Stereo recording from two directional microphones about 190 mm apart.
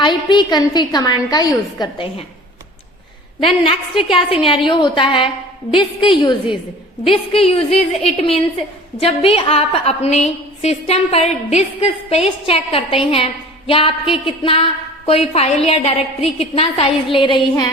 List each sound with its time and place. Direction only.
0.0 s a woman's voice: 25° left (ahead or behind)
3.6 s a woman's voice: 30° left (ahead or behind)